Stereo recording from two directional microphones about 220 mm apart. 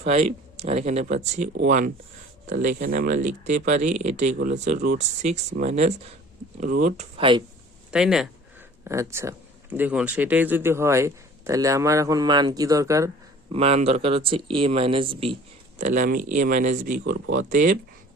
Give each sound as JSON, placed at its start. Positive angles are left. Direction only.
{"t": 0.0, "sound": "speech", "side_deg": -30}
{"t": 7.9, "sound": "speech", "side_deg": -5}
{"t": 13.5, "sound": "speech", "side_deg": -25}
{"t": 15.8, "sound": "speech", "side_deg": -35}
{"t": 17.0, "sound": "speech", "side_deg": -50}
{"t": 17.5, "sound": "speech", "side_deg": -35}